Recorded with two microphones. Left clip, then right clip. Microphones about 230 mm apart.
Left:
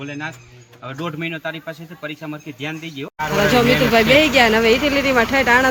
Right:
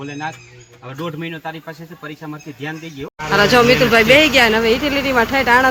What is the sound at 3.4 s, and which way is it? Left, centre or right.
Speech, centre.